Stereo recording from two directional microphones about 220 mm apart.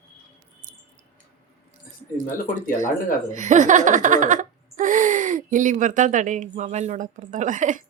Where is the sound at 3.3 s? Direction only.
35° right (ahead or behind).